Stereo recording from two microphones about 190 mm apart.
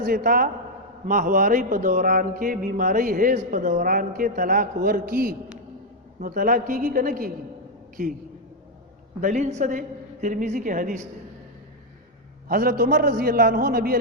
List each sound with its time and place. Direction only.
0.0 s speech: 50° right (ahead or behind)
9.2 s a woman's voice: 40° right (ahead or behind)
12.5 s speech: 50° right (ahead or behind)